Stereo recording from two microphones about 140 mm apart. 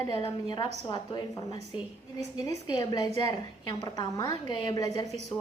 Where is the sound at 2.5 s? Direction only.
30° left (ahead or behind).